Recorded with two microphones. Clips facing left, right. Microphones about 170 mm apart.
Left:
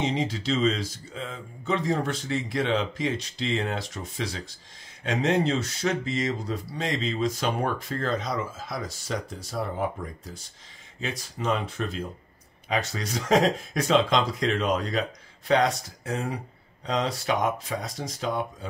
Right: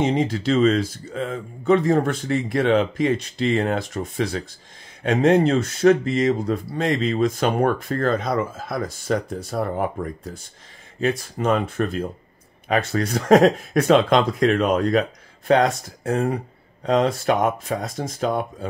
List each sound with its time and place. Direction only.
0.0 s speech: 55° right (ahead or behind)